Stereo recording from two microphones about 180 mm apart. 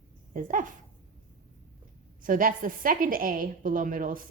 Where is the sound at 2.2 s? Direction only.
50° right (ahead or behind).